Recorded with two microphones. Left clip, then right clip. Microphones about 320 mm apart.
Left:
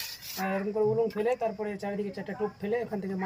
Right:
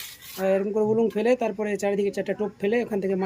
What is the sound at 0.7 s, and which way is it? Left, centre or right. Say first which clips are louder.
Speech: right 4 dB; right.